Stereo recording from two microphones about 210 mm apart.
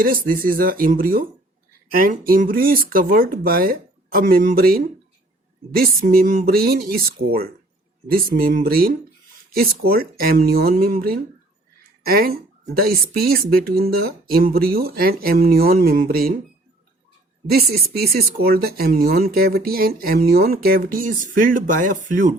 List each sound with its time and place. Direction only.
0.0 s speech: 40° right (ahead or behind)
6.0 s speech: 45° right (ahead or behind)
17.4 s speech: 50° right (ahead or behind)